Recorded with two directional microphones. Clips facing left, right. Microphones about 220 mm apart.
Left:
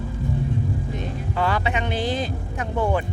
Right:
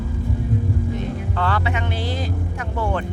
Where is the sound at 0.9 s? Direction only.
15° left (ahead or behind).